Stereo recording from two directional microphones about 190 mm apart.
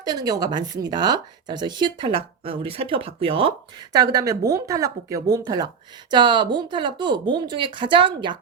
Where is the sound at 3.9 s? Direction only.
20° right (ahead or behind).